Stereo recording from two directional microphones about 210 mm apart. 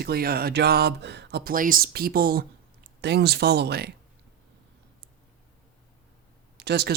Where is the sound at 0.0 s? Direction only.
45° right (ahead or behind).